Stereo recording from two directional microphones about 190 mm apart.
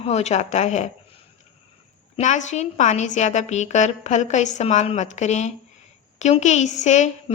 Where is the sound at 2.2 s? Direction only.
40° left (ahead or behind).